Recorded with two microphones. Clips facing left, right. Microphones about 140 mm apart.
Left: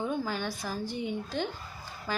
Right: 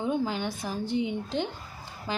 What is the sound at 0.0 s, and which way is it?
Speech, 20° right (ahead or behind).